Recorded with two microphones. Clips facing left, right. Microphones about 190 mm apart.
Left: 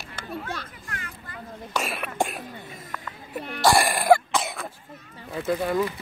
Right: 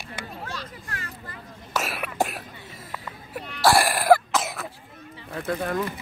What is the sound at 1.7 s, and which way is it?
Cough, centre (ahead or behind).